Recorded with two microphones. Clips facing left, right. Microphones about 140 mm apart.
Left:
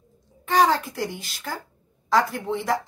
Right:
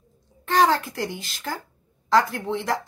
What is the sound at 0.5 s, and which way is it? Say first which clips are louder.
A woman's voice: even; 5° left (ahead or behind).